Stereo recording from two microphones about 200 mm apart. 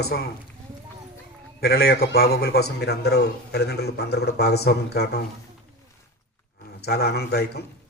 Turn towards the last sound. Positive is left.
turn(degrees=55)  # may be behind; listen again after turning